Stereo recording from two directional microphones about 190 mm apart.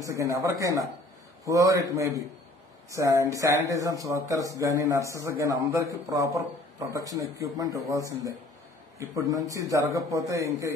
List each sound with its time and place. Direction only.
0.0 s speech: 15° right (ahead or behind)